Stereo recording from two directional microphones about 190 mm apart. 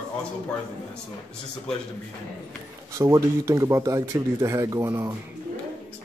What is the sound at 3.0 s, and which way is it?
Speech, 15° right (ahead or behind).